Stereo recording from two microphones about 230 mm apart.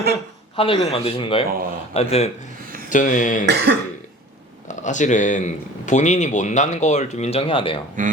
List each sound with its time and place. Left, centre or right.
0.5 s a man's voice: left
3.4 s cough: right
4.7 s speech: left
8.0 s speech: right